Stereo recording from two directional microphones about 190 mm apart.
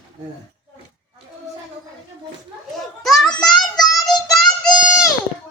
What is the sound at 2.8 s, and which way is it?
Children playing, centre (ahead or behind).